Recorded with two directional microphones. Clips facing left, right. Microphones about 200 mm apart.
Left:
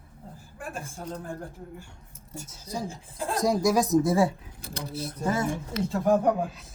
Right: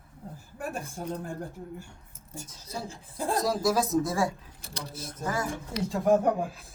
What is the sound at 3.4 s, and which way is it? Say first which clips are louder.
Speech: left 4 dB; 20° left (ahead or behind).